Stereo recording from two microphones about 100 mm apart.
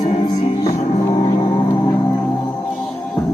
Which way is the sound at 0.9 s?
85° left.